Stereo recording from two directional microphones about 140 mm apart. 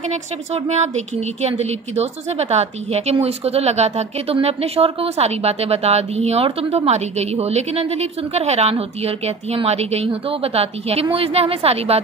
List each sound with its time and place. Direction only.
0.1 s speech: 55° right (ahead or behind)